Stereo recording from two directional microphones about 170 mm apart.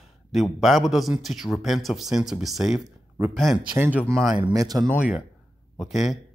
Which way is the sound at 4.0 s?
5° left (ahead or behind).